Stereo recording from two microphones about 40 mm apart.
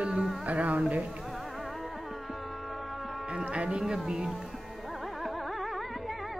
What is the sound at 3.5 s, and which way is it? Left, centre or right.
Speech, right.